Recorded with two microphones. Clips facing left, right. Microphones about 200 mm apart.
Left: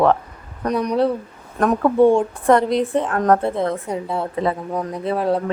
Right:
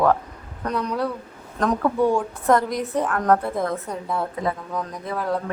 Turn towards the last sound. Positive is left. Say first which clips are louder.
# left 6 dB
turn(degrees=25)  # may be behind; listen again after turning